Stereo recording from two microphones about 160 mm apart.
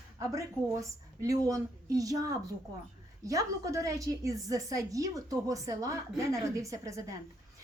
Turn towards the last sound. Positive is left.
turn(degrees=-20)  # may be behind; listen again after turning